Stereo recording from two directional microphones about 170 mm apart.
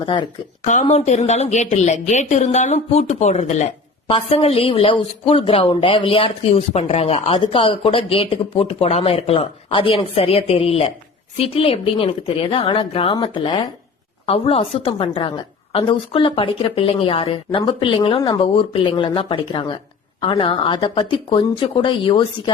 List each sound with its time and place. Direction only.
0.0 s speech: 30° left (ahead or behind)
0.6 s a woman's voice: 45° left (ahead or behind); by 22.5 s 30° left (ahead or behind)